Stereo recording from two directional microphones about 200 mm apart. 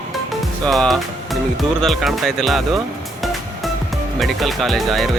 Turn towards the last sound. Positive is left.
turn(degrees=0)  # may be behind; listen again after turning